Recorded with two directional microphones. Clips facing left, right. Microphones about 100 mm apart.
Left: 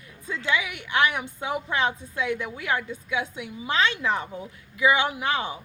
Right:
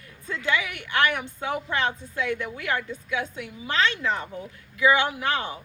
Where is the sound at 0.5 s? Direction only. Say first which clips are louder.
Left 1 dB; 15° left (ahead or behind).